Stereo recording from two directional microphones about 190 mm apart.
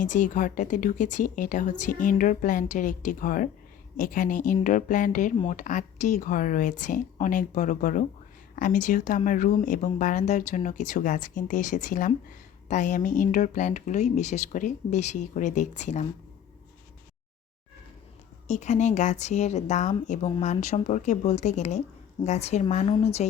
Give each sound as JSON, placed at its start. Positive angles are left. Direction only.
{"t": 0.0, "sound": "speech", "side_deg": 45}
{"t": 18.4, "sound": "speech", "side_deg": 40}